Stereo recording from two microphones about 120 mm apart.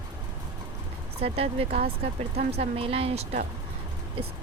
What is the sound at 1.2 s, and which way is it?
Speech, 55° right (ahead or behind).